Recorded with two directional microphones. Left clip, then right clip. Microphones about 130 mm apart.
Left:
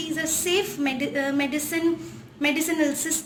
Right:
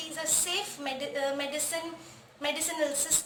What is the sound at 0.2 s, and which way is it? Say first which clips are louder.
A woman's voice: left 6 dB; 20° right (ahead or behind).